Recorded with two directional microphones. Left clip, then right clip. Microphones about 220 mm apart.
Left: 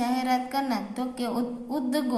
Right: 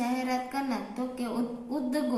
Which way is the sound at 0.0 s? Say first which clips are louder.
Left 4 dB; 40° left (ahead or behind).